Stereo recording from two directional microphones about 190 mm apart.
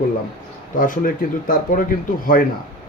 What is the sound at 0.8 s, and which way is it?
Speech, 45° left (ahead or behind).